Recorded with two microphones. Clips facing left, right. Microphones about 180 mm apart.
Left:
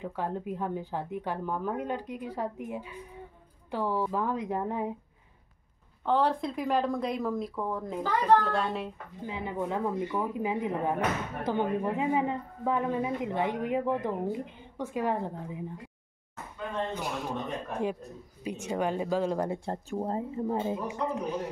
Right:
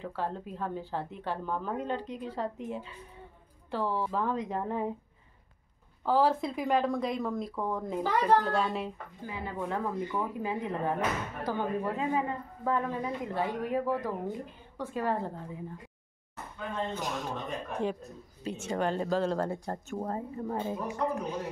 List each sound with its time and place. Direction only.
0.0 s speech: 15° left (ahead or behind)
6.0 s speech: centre (ahead or behind)
9.2 s a woman's voice: 20° left (ahead or behind)
16.9 s speech: 10° left (ahead or behind)
19.6 s a woman's voice: 25° left (ahead or behind)